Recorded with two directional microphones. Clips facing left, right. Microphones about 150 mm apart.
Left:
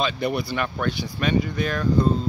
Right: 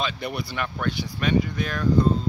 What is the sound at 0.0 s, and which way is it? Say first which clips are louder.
Speech: left 5 dB; 40° left (ahead or behind).